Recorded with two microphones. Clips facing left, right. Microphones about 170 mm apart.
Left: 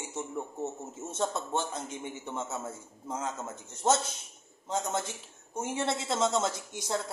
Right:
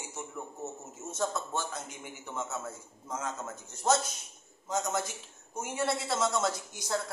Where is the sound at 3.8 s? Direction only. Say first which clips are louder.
Left 1 dB; 25° left (ahead or behind).